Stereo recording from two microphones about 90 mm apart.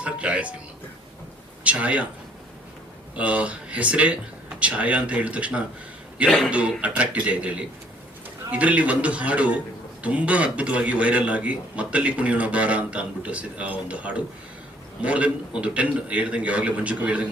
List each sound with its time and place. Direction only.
0.0 s a man's voice: 15° right (ahead or behind)
1.6 s a man's voice: 15° right (ahead or behind)
3.2 s a man's voice: 15° right (ahead or behind)